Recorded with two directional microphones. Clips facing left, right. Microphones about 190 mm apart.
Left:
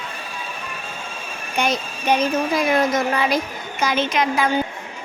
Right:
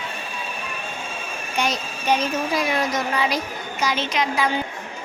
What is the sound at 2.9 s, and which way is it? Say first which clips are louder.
A woman's voice: left 3 dB; 50° left (ahead or behind).